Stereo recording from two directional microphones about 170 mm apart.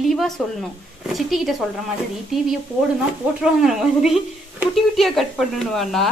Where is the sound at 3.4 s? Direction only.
5° right (ahead or behind).